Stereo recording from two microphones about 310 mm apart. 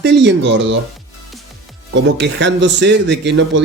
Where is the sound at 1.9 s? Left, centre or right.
Right.